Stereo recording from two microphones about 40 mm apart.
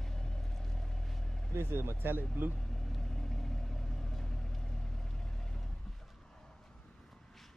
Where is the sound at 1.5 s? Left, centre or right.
Right.